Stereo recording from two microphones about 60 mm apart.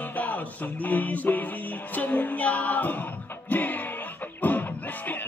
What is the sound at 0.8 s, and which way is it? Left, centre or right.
Music, left.